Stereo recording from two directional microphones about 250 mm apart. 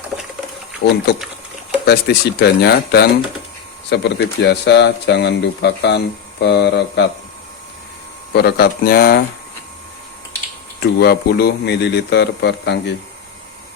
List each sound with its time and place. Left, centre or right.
0.8 s speech: left
8.3 s speech: left
10.8 s speech: left